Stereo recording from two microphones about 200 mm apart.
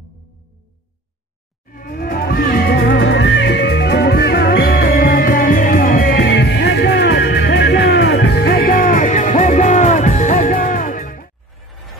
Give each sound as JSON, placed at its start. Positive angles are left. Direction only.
{"t": 1.7, "sound": "music", "side_deg": 45}